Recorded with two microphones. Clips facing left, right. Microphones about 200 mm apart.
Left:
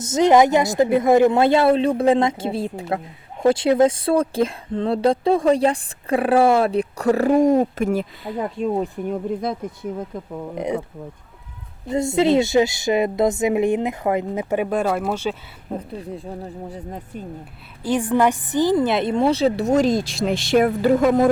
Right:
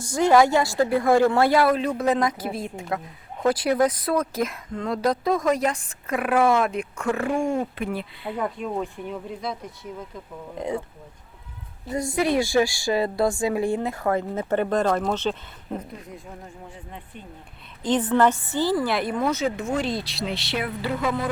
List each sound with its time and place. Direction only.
0.0 s a woman's voice: 20° left (ahead or behind); by 10.3 s 55° left (ahead or behind)
10.5 s a woman's voice: 20° left (ahead or behind)
11.9 s a woman's voice: 25° left (ahead or behind); by 15.4 s 10° left (ahead or behind)
16.0 s speech: 30° left (ahead or behind)
17.8 s speech: 10° left (ahead or behind); by 21.2 s 45° left (ahead or behind)